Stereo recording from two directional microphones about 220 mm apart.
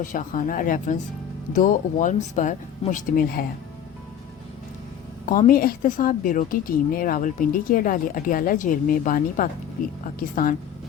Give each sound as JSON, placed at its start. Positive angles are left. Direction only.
{"t": 0.0, "sound": "speech", "side_deg": 35}
{"t": 5.2, "sound": "speech", "side_deg": 40}